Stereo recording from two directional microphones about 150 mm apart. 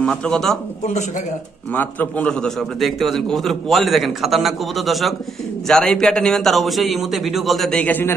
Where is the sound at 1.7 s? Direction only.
10° left (ahead or behind).